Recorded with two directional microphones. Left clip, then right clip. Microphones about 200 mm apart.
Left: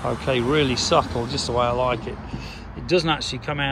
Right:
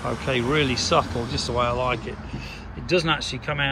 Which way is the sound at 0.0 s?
15° left (ahead or behind).